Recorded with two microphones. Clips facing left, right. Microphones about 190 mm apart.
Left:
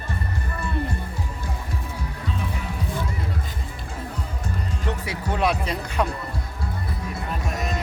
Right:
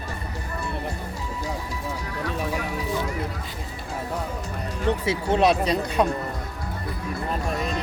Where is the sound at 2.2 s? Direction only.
65° right (ahead or behind).